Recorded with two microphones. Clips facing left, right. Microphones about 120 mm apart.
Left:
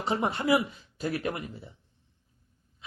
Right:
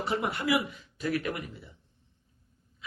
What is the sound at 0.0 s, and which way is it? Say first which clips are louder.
Speech: left 2 dB; 30° left (ahead or behind).